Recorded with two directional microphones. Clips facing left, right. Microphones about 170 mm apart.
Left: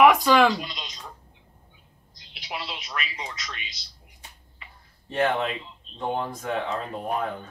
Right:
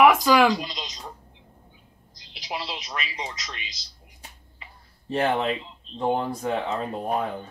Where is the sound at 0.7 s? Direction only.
40° right (ahead or behind).